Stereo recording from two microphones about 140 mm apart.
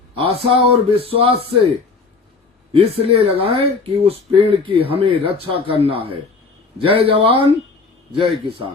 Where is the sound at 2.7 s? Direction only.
45° right (ahead or behind).